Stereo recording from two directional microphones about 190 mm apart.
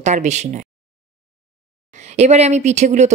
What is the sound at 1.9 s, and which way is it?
Speech, 35° right (ahead or behind).